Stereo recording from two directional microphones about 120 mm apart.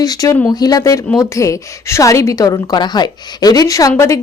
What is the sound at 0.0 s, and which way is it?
A woman's voice, 30° left (ahead or behind).